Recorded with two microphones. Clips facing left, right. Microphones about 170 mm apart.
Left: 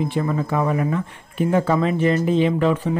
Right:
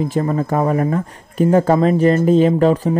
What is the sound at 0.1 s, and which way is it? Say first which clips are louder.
A man's voice: right 4 dB; 40° right (ahead or behind).